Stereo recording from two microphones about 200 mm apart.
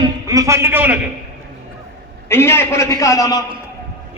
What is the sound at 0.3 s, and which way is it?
Speech, 15° right (ahead or behind).